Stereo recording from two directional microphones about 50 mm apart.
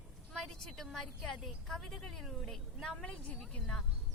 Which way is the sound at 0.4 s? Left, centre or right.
Centre.